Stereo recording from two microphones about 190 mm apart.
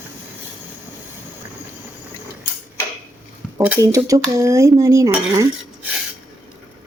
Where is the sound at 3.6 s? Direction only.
10° right (ahead or behind).